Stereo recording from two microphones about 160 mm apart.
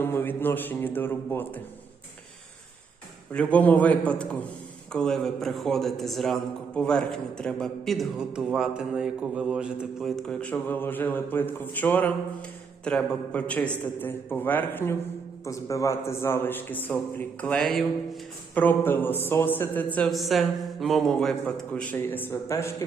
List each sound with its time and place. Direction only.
0.0 s speech: 15° left (ahead or behind)
3.3 s a man's voice: 10° left (ahead or behind)